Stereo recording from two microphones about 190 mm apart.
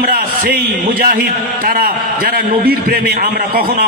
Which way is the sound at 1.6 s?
50° right (ahead or behind).